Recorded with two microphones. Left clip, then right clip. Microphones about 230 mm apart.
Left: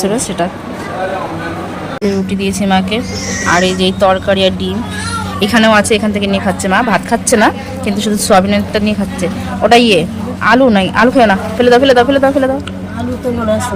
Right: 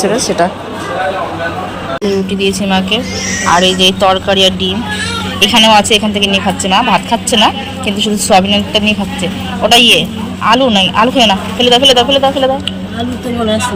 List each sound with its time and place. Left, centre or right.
0.2 s speech: left
2.6 s a man's voice: centre